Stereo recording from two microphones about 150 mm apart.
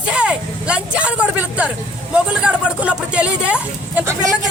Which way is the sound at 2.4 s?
10° right (ahead or behind).